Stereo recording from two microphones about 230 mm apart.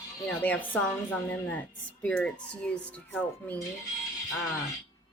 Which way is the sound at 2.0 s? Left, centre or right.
Centre.